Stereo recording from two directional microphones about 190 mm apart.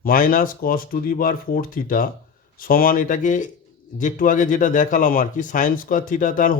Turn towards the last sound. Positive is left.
turn(degrees=45)  # may be behind; listen again after turning